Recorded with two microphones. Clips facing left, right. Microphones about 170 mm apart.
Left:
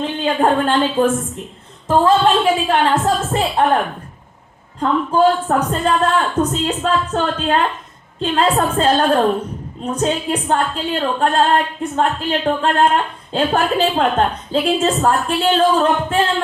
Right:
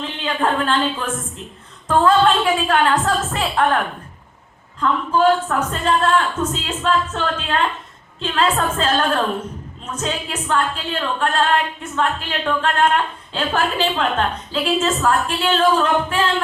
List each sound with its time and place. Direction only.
0.2 s a woman's voice: 35° left (ahead or behind)
1.9 s a woman's voice: 25° left (ahead or behind)
4.8 s a woman's voice: 35° left (ahead or behind)